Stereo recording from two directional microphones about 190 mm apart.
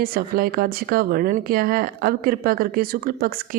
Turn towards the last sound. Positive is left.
turn(degrees=-50)  # may be behind; listen again after turning